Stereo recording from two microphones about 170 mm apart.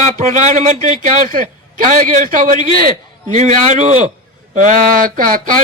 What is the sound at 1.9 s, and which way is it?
A man's voice, 50° right (ahead or behind).